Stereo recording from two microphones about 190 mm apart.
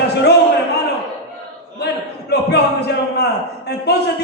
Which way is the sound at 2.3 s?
60° left (ahead or behind).